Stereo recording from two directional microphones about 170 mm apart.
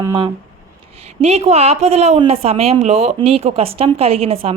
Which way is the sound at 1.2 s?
40° right (ahead or behind).